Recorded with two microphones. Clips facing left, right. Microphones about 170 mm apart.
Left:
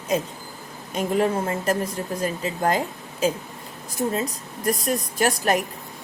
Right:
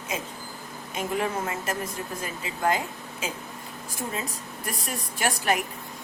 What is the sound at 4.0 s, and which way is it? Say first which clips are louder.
A woman's voice: left 8 dB; 40° left (ahead or behind).